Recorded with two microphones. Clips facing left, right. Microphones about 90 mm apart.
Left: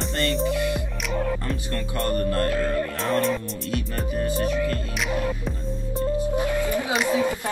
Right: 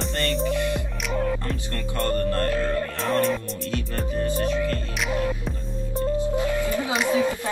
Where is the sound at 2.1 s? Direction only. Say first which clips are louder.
Even; 20° left (ahead or behind).